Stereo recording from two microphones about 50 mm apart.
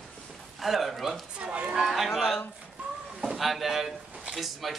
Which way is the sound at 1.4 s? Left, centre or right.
Right.